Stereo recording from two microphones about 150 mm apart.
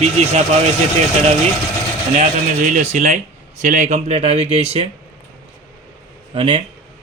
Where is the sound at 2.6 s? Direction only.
55° right (ahead or behind).